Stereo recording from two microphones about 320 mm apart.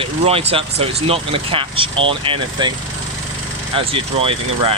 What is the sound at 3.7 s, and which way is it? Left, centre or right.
Speech, centre.